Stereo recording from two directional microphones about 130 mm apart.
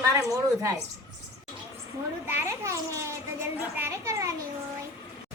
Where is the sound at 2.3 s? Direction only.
20° right (ahead or behind).